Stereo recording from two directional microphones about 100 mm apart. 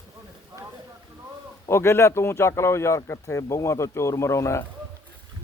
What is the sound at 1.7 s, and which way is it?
Speech, 25° left (ahead or behind).